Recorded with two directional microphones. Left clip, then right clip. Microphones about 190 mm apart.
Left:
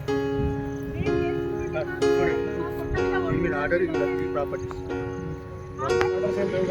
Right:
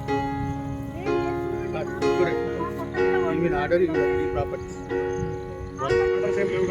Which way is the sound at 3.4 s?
55° right (ahead or behind).